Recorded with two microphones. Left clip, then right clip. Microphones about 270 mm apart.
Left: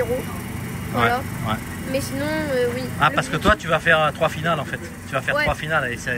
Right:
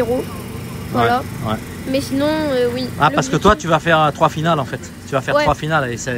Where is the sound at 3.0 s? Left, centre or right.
Centre.